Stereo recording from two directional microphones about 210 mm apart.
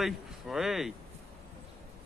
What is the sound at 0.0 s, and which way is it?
Speech, centre (ahead or behind).